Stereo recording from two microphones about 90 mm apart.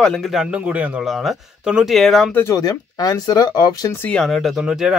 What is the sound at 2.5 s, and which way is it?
Speech, 45° left (ahead or behind).